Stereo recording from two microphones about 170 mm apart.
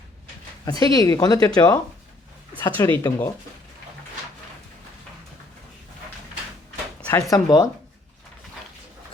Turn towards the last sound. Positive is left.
turn(degrees=20)  # may be behind; listen again after turning